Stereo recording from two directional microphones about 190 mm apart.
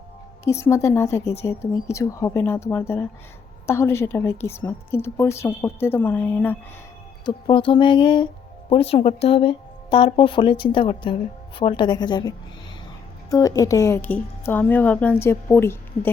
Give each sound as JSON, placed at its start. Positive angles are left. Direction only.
{"t": 0.4, "sound": "a woman's voice", "side_deg": 15}
{"t": 7.3, "sound": "speech", "side_deg": 25}
{"t": 13.3, "sound": "a woman's voice", "side_deg": 20}